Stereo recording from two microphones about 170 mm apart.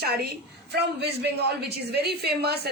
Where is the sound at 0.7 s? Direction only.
75° right (ahead or behind).